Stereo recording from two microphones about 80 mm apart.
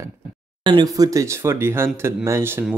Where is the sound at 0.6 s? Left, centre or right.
Right.